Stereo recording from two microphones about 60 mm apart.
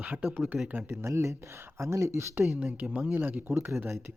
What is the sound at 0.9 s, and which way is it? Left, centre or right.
Speech, right.